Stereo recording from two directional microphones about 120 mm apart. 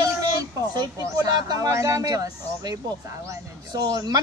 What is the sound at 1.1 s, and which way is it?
A woman's voice, 30° right (ahead or behind).